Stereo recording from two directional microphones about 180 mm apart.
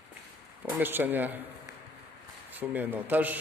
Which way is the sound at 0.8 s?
10° right (ahead or behind).